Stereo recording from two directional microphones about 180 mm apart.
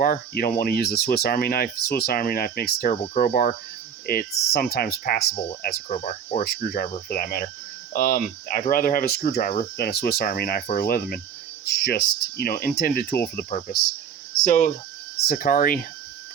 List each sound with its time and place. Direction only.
0.0 s speech: 50° left (ahead or behind)
6.0 s speech: 40° left (ahead or behind)
6.4 s speech: 55° left (ahead or behind)
14.4 s speech: 40° left (ahead or behind)
15.3 s speech: 55° left (ahead or behind)